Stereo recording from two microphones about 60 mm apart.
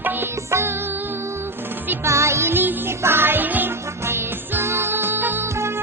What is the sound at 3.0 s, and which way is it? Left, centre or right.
Music, right.